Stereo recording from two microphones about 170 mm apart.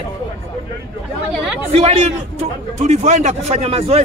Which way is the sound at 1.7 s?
35° right (ahead or behind).